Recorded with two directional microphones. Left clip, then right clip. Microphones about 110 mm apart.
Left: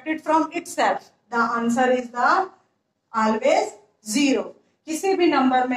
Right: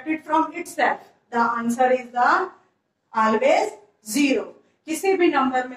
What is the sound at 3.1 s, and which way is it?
Speech, 20° left (ahead or behind).